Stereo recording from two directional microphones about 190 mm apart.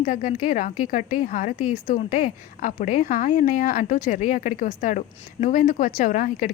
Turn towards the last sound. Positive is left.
turn(degrees=45)  # may be behind; listen again after turning